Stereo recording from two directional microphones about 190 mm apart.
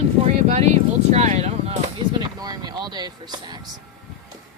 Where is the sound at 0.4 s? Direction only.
35° right (ahead or behind).